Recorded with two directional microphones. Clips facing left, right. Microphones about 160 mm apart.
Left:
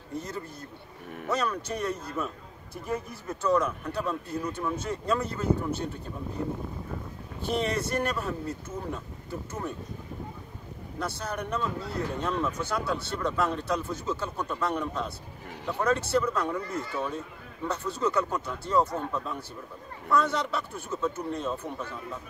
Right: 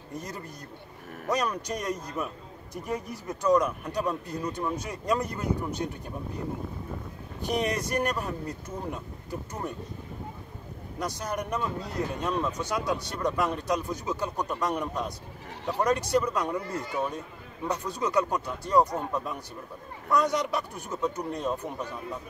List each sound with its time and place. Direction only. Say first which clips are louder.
0.2 s a man's voice: left 2 dB; 15° right (ahead or behind)
7.4 s a man's voice: even; 15° right (ahead or behind)
11.0 s a man's voice: right 1 dB; 15° right (ahead or behind)